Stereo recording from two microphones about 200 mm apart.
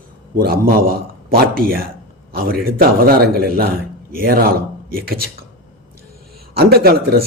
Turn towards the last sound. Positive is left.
turn(degrees=-50)  # may be behind; listen again after turning